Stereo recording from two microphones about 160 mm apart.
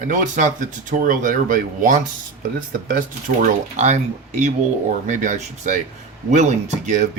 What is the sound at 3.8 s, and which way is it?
Speech, 45° right (ahead or behind).